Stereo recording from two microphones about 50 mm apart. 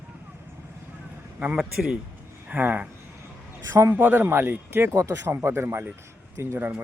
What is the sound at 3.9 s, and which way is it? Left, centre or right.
Speech, right.